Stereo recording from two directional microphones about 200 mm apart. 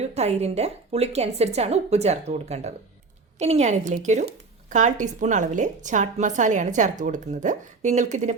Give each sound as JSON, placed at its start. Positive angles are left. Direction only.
{"t": 0.0, "sound": "a woman's voice", "side_deg": -30}